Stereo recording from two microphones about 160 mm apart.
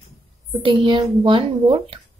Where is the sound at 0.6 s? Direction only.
35° right (ahead or behind).